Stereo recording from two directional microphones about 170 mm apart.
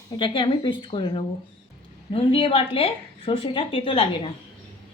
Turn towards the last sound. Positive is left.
turn(degrees=35)  # may be behind; listen again after turning